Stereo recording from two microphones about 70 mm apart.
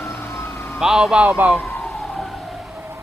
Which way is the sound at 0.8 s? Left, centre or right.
Centre.